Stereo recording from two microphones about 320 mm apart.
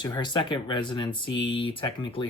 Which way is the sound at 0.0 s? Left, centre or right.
Centre.